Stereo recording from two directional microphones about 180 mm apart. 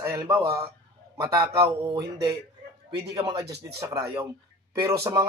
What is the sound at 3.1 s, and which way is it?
Speech, 20° right (ahead or behind).